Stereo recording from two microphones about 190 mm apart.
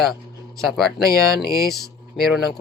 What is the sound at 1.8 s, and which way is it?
Speech, centre (ahead or behind).